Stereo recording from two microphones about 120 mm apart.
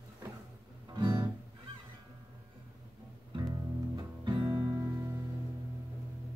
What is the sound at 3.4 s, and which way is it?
Music, 35° right (ahead or behind).